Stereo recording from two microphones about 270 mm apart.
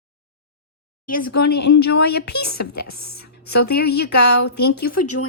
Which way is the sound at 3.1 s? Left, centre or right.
Left.